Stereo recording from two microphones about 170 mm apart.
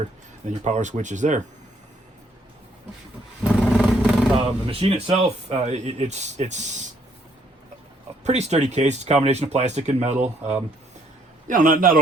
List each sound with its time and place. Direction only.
0.6 s speech: 45° right (ahead or behind)
3.6 s vehicle: centre (ahead or behind)
4.4 s speech: 35° right (ahead or behind)
8.2 s speech: 40° right (ahead or behind)
11.4 s speech: 50° right (ahead or behind)